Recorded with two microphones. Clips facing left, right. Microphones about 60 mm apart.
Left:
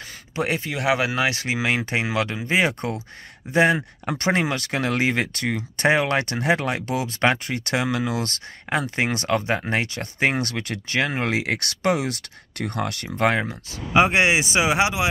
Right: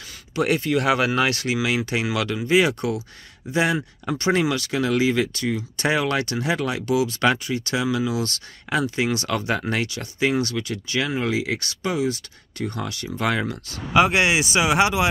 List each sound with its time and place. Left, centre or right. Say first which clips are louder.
0.4 s speech: right 4 dB; centre
1.6 s speech: left 2 dB; left
13.4 s speech: right 1 dB; left